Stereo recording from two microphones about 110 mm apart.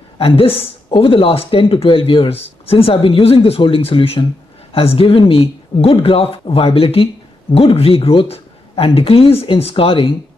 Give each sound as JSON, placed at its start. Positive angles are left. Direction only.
{"t": 0.2, "sound": "speech", "side_deg": 60}